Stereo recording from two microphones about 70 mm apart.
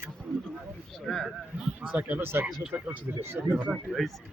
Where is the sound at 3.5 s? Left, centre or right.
Centre.